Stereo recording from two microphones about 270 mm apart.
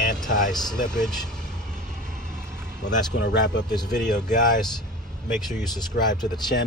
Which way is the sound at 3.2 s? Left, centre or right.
Left.